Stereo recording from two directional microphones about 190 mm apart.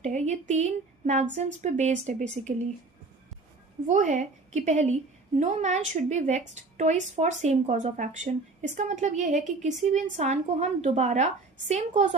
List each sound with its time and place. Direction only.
0.0 s a woman's voice: 35° right (ahead or behind)
3.8 s a woman's voice: 40° right (ahead or behind)